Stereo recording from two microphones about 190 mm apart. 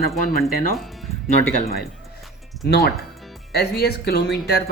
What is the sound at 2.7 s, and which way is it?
Speech, 60° left (ahead or behind).